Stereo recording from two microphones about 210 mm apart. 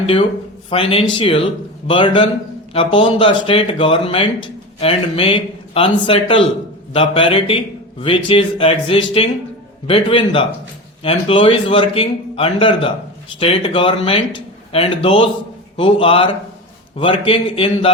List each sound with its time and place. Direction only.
0.0 s a man's voice: 25° left (ahead or behind)